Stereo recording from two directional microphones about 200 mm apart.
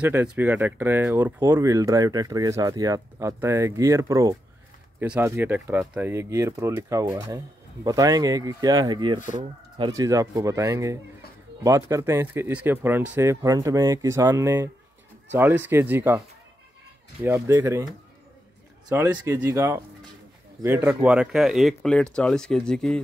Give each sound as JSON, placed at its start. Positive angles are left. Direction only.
{"t": 0.0, "sound": "speech", "side_deg": -10}
{"t": 17.2, "sound": "speech", "side_deg": -10}
{"t": 18.9, "sound": "speech", "side_deg": -15}